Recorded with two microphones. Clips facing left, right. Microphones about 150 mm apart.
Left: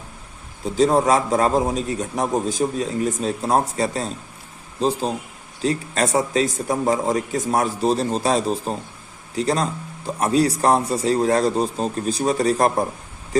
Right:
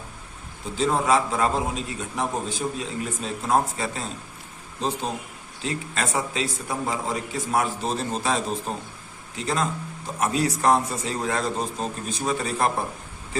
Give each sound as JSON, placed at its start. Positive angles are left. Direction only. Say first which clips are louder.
{"t": 0.6, "sound": "a man's voice", "louder": "left 7 dB", "side_deg": 35}